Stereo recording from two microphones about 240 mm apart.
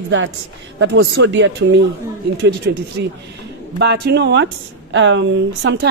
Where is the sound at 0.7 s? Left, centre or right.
Right.